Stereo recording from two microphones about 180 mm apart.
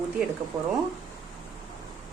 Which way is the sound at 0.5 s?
20° right (ahead or behind).